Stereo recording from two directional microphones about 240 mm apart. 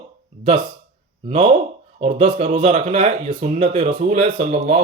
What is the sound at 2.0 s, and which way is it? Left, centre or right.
Speech, right.